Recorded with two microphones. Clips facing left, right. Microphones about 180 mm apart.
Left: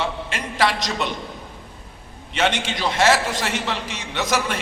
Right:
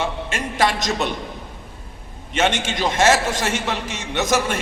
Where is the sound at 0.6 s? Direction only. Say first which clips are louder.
Right 1 dB; 45° right (ahead or behind).